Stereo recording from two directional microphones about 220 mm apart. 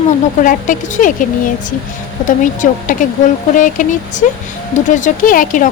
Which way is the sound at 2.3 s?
35° left (ahead or behind).